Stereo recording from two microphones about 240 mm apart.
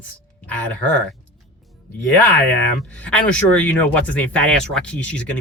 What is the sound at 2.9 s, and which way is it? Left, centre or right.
Speech, centre.